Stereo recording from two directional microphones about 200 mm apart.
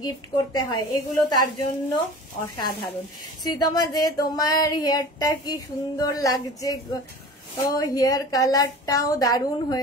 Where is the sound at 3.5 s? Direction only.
20° left (ahead or behind).